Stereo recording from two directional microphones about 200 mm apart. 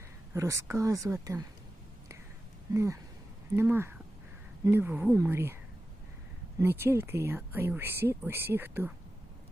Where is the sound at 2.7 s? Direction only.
15° right (ahead or behind).